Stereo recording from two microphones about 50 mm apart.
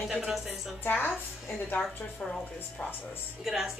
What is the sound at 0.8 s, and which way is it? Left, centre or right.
Speech, left.